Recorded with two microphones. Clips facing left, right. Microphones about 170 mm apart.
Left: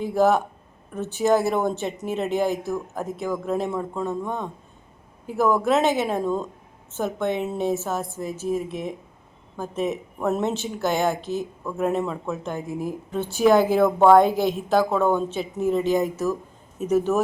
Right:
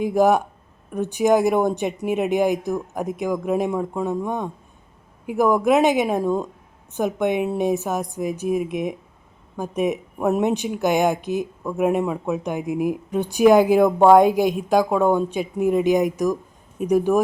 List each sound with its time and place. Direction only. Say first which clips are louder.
0.0 s a woman's voice: right 2 dB; 15° right (ahead or behind)